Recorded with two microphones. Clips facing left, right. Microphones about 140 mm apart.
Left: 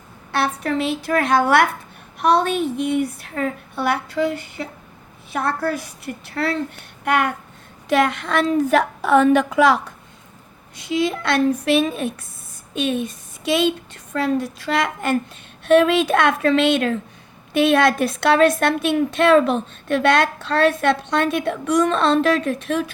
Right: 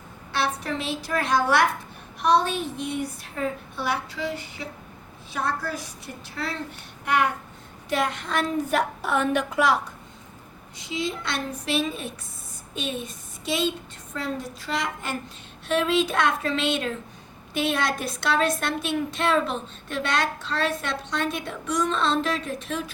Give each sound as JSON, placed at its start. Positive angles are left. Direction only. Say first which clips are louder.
{"t": 0.3, "sound": "a woman's voice", "louder": "left 5 dB", "side_deg": 55}
{"t": 7.9, "sound": "a woman's voice", "louder": "left 7 dB", "side_deg": 80}
{"t": 10.8, "sound": "a woman's voice", "louder": "left 8 dB", "side_deg": 65}